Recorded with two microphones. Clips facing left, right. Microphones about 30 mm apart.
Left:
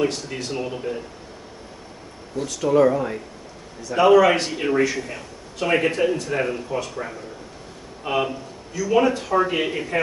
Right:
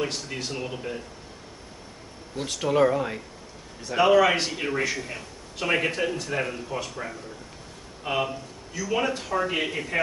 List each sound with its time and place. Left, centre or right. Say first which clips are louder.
0.1 s a man's voice: left 3 dB; centre
0.5 s a man's voice: left 8 dB; centre
2.3 s speech: left 4 dB; right
2.8 s speech: left 3 dB; centre
3.9 s a man's voice: left 4 dB; centre